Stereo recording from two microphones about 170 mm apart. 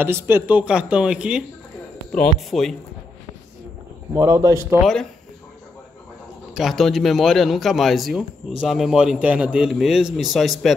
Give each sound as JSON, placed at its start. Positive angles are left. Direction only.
{"t": 0.0, "sound": "a man's voice", "side_deg": -10}
{"t": 4.1, "sound": "speech", "side_deg": -15}
{"t": 6.5, "sound": "a man's voice", "side_deg": 0}